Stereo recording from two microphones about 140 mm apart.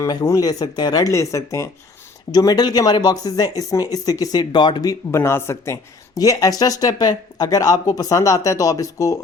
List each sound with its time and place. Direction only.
0.0 s speech: 25° left (ahead or behind)